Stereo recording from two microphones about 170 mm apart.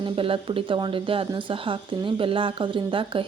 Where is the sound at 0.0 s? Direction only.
30° right (ahead or behind).